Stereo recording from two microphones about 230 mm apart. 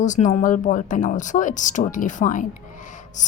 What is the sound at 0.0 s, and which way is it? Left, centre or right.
A woman's voice, left.